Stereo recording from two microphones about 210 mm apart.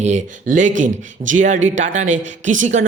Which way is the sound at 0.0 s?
35° right (ahead or behind).